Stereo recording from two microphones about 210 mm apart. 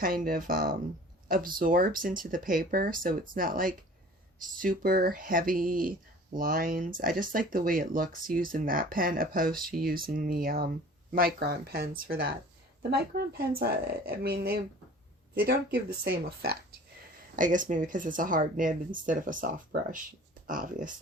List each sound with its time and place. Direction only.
0.0 s speech: 40° right (ahead or behind)
20.5 s speech: 40° right (ahead or behind)